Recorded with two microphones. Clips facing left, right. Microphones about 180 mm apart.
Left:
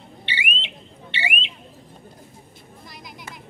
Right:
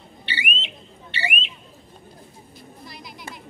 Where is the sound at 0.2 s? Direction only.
40° right (ahead or behind).